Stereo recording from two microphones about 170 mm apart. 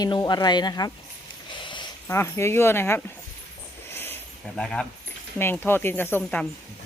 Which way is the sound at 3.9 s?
10° left (ahead or behind).